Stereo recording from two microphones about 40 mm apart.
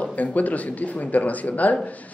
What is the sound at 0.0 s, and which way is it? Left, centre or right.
Speech, left.